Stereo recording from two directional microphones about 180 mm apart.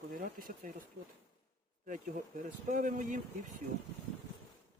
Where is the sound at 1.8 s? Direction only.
45° right (ahead or behind).